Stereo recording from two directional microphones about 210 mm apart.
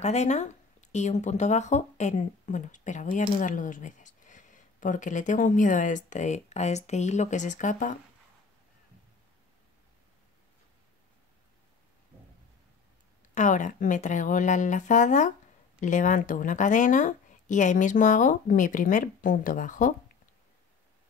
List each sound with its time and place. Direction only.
0.0 s speech: 30° left (ahead or behind)
13.3 s speech: 35° left (ahead or behind)